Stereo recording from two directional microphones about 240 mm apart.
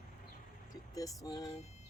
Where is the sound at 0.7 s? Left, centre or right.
Centre.